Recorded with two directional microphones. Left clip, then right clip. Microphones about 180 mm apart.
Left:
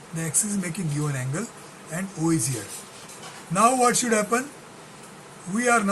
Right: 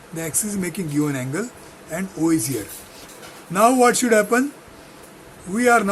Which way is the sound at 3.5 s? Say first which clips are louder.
Right 4 dB; 35° right (ahead or behind).